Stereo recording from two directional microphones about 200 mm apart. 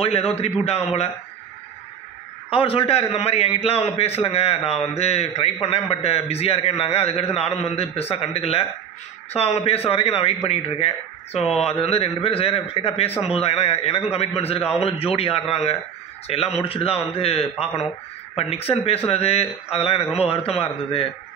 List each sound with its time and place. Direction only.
0.0 s a man's voice: 30° left (ahead or behind)
2.5 s a man's voice: 30° left (ahead or behind)